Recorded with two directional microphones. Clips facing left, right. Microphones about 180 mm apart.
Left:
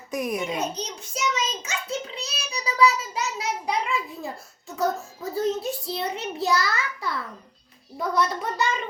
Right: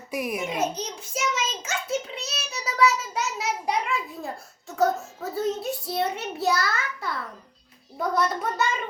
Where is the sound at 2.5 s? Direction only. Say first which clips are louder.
Left 1 dB; 5° right (ahead or behind).